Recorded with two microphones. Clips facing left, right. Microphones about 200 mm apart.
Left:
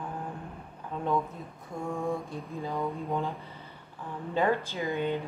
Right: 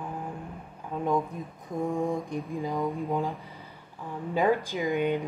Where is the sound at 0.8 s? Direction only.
10° right (ahead or behind).